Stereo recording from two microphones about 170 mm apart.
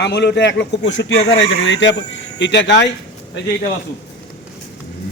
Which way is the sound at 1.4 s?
90° left.